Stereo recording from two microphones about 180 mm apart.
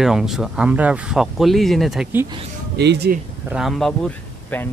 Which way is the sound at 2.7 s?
70° right (ahead or behind).